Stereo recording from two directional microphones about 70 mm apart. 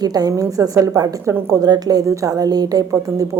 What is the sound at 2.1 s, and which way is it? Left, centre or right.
Speech, right.